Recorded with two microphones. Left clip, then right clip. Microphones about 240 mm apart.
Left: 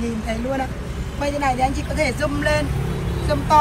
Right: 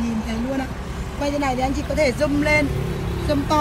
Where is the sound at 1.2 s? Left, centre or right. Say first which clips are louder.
Left 2 dB; centre.